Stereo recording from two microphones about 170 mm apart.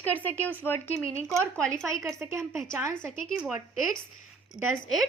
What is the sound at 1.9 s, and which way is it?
A woman's voice, 20° right (ahead or behind).